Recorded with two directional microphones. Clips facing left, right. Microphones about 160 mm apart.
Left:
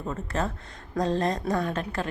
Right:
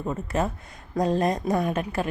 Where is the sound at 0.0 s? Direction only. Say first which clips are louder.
Right 3 dB; 15° right (ahead or behind).